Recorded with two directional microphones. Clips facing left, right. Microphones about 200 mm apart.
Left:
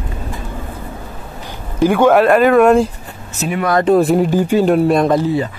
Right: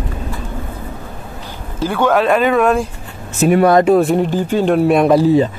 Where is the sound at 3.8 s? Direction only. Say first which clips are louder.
Even; centre (ahead or behind).